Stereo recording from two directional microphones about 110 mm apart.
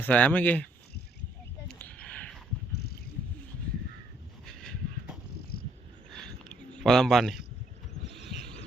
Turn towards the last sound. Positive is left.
turn(degrees=0)  # may be behind; listen again after turning